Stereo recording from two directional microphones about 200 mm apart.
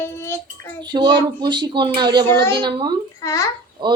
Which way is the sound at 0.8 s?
25° right (ahead or behind).